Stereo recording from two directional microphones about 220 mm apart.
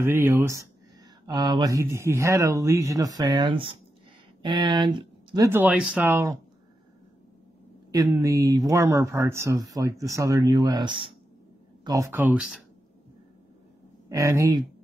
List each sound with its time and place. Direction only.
0.0 s speech: 10° right (ahead or behind)
7.9 s speech: 15° right (ahead or behind)
14.0 s speech: 15° right (ahead or behind)